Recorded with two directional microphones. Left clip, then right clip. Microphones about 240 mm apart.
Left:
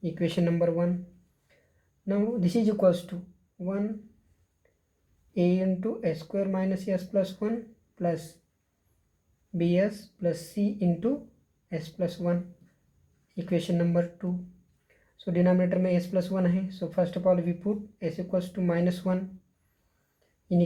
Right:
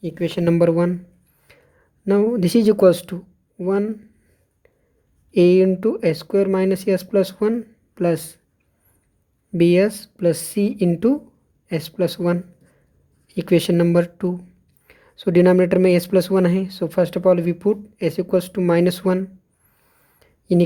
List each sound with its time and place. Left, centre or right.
0.0 s speech: right
2.0 s speech: right
5.3 s speech: right
9.6 s speech: right
20.1 s a sound: right